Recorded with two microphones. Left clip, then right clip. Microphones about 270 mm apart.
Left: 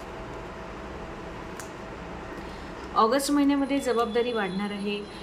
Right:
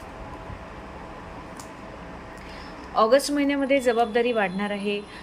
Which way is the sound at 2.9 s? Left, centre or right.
Centre.